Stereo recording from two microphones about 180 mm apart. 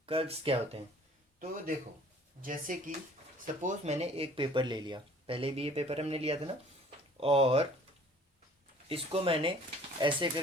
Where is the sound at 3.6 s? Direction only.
35° right (ahead or behind).